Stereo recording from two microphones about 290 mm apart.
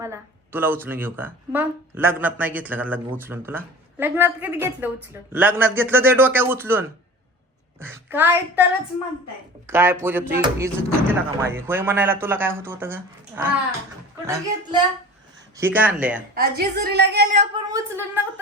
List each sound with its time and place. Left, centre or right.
0.0 s speech: centre
9.6 s speech: centre
16.3 s a woman's voice: right; by 18.2 s centre